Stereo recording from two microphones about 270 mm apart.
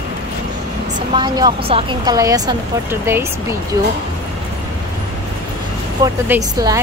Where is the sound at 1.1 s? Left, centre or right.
Centre.